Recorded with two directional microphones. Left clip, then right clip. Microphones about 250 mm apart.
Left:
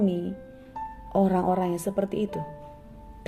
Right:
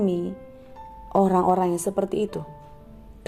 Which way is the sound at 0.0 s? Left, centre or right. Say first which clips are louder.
Right 3 dB; centre.